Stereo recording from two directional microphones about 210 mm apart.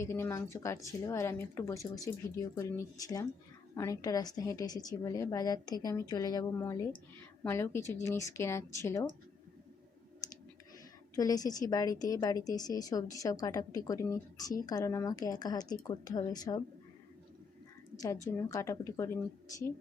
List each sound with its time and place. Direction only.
0.0 s a woman's voice: 10° left (ahead or behind)
11.1 s a woman's voice: 15° left (ahead or behind)
18.3 s a woman's voice: 15° left (ahead or behind)